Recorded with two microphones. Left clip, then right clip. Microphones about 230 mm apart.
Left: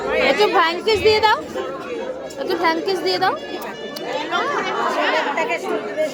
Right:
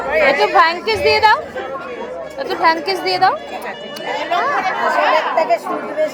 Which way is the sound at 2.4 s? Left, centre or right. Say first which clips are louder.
Right 4 dB; centre.